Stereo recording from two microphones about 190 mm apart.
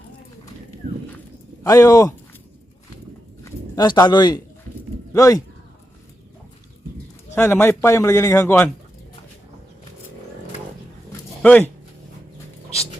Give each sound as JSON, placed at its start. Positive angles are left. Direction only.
{"t": 1.6, "sound": "speech", "side_deg": 20}
{"t": 3.4, "sound": "a sound", "side_deg": 20}
{"t": 5.1, "sound": "a man's voice", "side_deg": 15}
{"t": 7.3, "sound": "a man's voice", "side_deg": 10}
{"t": 11.4, "sound": "a man's voice", "side_deg": 5}